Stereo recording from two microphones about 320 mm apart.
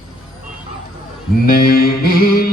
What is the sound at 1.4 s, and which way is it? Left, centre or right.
Music, left.